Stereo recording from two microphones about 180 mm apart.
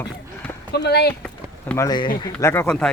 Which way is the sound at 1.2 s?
10° left (ahead or behind).